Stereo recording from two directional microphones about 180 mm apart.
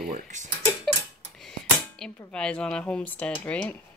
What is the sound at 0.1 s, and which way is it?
Speech, 45° right (ahead or behind).